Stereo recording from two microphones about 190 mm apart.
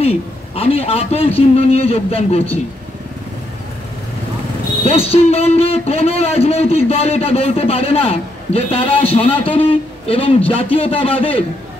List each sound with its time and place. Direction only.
0.0 s a man's voice: 30° left (ahead or behind)
4.8 s a man's voice: 30° left (ahead or behind)